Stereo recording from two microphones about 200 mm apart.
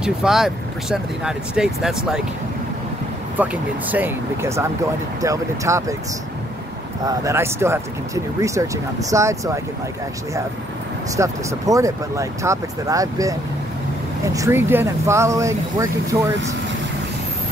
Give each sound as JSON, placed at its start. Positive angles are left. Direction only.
{"t": 0.0, "sound": "speech", "side_deg": -5}
{"t": 3.9, "sound": "speech", "side_deg": -10}
{"t": 7.1, "sound": "speech", "side_deg": -15}
{"t": 11.1, "sound": "speech", "side_deg": -15}